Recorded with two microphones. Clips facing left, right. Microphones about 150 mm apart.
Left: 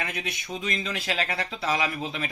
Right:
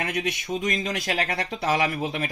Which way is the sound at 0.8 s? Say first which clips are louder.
Right 3 dB; 45° right (ahead or behind).